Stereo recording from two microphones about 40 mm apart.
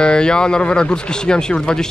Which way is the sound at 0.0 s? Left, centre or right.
Left.